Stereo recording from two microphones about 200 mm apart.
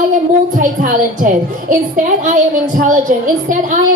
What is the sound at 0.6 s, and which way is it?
A woman's voice, 40° right (ahead or behind).